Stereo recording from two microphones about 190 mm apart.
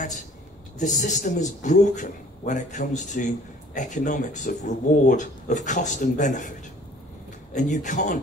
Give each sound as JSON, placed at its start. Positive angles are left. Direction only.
{"t": 0.7, "sound": "speech", "side_deg": 40}
{"t": 7.5, "sound": "speech", "side_deg": 40}